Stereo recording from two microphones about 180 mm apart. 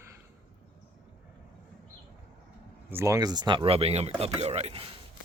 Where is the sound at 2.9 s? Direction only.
15° right (ahead or behind); by 4.9 s 35° right (ahead or behind).